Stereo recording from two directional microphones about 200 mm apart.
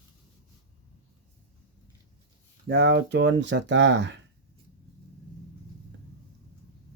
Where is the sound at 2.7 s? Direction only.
55° right (ahead or behind).